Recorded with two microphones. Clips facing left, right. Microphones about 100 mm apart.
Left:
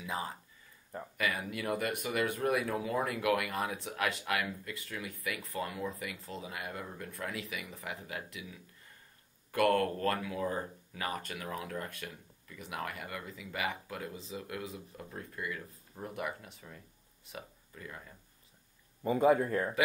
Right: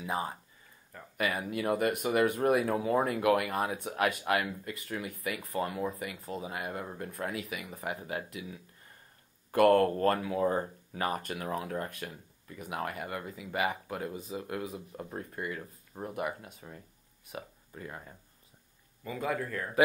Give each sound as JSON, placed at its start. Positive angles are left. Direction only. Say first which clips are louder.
{"t": 0.0, "sound": "speech", "louder": "right 4 dB", "side_deg": -35}
{"t": 19.0, "sound": "speech", "louder": "left 7 dB", "side_deg": 25}